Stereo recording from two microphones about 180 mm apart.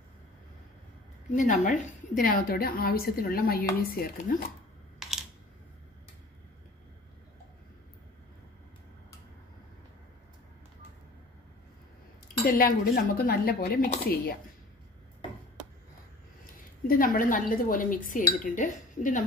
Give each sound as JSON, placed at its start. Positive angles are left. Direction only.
{"t": 1.3, "sound": "a woman's voice", "side_deg": 45}
{"t": 12.4, "sound": "a woman's voice", "side_deg": 55}
{"t": 16.8, "sound": "speech", "side_deg": 50}